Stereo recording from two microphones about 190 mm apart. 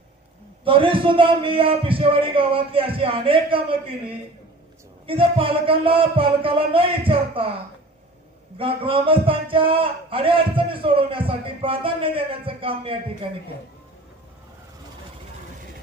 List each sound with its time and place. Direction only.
0.6 s a man's voice: 30° right (ahead or behind)
5.0 s a man's voice: 30° right (ahead or behind)
8.5 s a man's voice: 30° right (ahead or behind)